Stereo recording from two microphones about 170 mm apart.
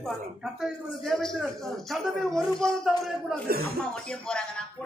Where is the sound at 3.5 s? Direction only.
60° right (ahead or behind).